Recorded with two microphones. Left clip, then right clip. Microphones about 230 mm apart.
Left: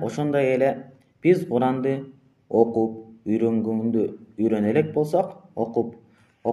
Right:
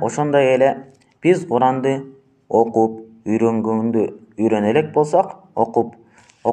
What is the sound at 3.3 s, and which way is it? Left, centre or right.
Speech, right.